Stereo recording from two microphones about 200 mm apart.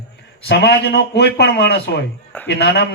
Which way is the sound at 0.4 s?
55° left (ahead or behind).